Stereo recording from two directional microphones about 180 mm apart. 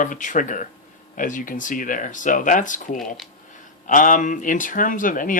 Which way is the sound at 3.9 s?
45° left (ahead or behind).